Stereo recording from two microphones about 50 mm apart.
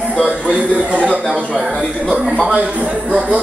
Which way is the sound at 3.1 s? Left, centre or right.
Centre.